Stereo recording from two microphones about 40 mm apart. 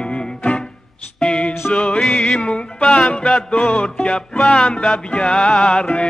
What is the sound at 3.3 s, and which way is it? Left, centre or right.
Music, left.